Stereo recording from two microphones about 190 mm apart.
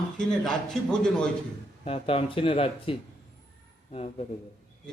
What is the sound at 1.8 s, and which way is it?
Speech, 30° left (ahead or behind).